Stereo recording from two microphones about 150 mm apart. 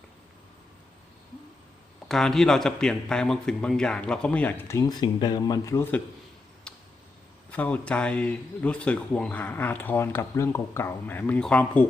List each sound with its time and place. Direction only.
2.0 s a man's voice: centre (ahead or behind)
6.7 s a sound: 5° left (ahead or behind)
7.5 s speech: 10° left (ahead or behind)